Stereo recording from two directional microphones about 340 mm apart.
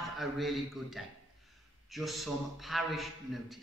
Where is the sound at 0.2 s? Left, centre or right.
Centre.